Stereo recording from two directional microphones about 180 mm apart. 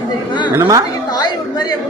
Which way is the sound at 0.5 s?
20° right (ahead or behind).